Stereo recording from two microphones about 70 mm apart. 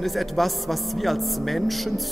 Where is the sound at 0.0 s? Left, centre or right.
Centre.